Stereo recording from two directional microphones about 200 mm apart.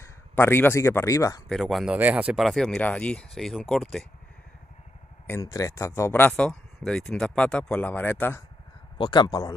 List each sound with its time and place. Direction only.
0.0 s speech: 10° left (ahead or behind)
1.5 s speech: centre (ahead or behind)
5.2 s speech: 15° left (ahead or behind)
8.9 s speech: 20° left (ahead or behind)